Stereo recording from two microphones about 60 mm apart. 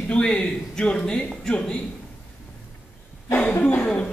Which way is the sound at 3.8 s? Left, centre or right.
Centre.